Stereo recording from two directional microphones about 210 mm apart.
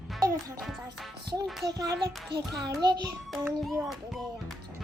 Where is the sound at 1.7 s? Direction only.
20° right (ahead or behind).